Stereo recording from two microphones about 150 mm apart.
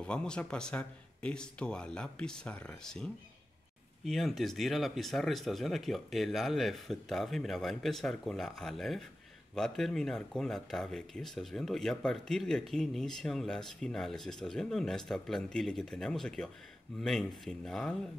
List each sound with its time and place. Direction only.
0.0 s speech: 5° left (ahead or behind)
17.5 s speech: 5° left (ahead or behind)